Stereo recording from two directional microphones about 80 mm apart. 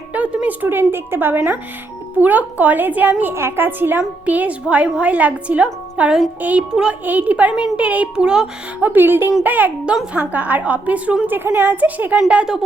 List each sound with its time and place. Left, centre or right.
0.1 s a woman's voice: centre
7.0 s a woman's voice: right